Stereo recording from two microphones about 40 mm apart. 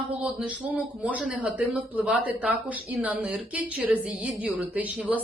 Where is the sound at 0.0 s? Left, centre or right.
Right.